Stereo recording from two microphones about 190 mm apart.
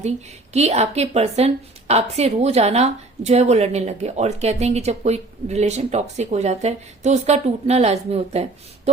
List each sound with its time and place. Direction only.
0.5 s a woman's voice: 35° right (ahead or behind)